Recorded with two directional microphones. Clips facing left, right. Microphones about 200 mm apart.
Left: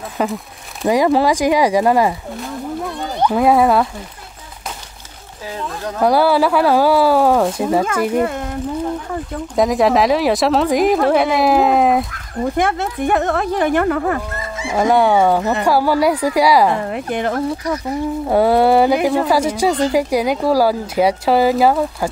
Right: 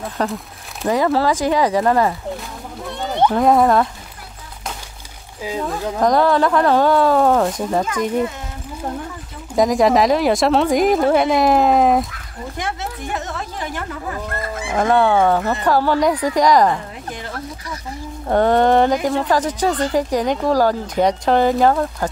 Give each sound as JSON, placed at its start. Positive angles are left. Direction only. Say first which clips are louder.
{"t": 0.2, "sound": "speech", "louder": "left 3 dB", "side_deg": 10}
{"t": 3.3, "sound": "a woman's voice", "louder": "left 1 dB", "side_deg": 5}
{"t": 5.9, "sound": "speech", "louder": "left 2 dB", "side_deg": 10}
{"t": 7.8, "sound": "speech", "louder": "left 3 dB", "side_deg": 60}
{"t": 9.6, "sound": "a woman's voice", "louder": "even", "side_deg": 0}
{"t": 12.1, "sound": "speech", "louder": "left 11 dB", "side_deg": 55}
{"t": 14.4, "sound": "livestock", "louder": "even", "side_deg": -55}
{"t": 14.7, "sound": "speech", "louder": "left 2 dB", "side_deg": 10}
{"t": 16.8, "sound": "speech", "louder": "left 11 dB", "side_deg": 65}
{"t": 18.3, "sound": "speech", "louder": "left 1 dB", "side_deg": 10}